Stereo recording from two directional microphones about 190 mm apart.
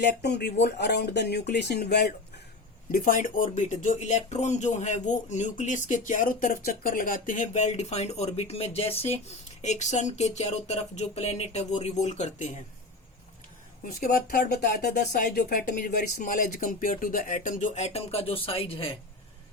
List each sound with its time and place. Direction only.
0.0 s speech: 60° left (ahead or behind)
2.9 s speech: 45° left (ahead or behind)
13.8 s speech: 45° left (ahead or behind); by 18.9 s 30° left (ahead or behind)